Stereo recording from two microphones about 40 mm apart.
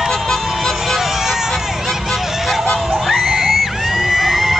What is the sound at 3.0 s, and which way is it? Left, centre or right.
Screaming, centre.